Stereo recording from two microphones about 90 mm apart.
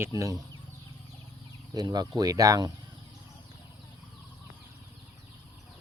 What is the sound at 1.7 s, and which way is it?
Speech, 50° right (ahead or behind).